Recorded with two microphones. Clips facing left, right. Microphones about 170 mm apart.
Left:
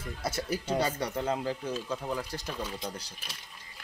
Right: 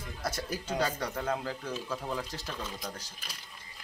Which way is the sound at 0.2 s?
5° left (ahead or behind).